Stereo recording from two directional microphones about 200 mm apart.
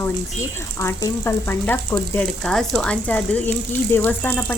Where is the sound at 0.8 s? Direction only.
15° left (ahead or behind).